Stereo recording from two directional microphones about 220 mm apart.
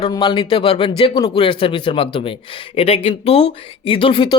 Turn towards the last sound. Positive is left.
turn(degrees=20)  # may be behind; listen again after turning